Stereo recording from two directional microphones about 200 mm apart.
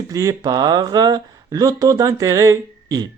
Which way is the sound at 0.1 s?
15° right (ahead or behind).